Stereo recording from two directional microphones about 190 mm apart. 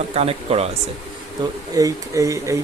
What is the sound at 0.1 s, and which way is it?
Speech, 30° right (ahead or behind).